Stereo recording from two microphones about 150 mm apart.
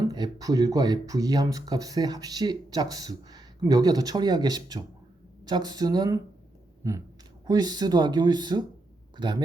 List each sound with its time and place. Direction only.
0.0 s speech: 25° right (ahead or behind)
7.4 s speech: 25° right (ahead or behind)